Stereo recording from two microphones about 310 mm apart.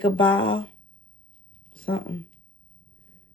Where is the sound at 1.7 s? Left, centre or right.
Centre.